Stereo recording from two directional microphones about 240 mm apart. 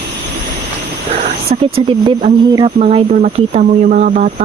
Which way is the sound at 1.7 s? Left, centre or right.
Right.